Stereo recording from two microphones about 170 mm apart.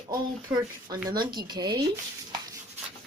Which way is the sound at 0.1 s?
25° right (ahead or behind).